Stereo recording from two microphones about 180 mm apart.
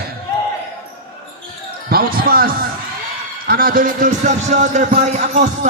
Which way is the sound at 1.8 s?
55° right (ahead or behind).